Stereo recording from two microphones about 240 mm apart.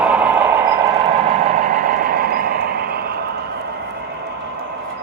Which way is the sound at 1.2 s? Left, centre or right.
Right.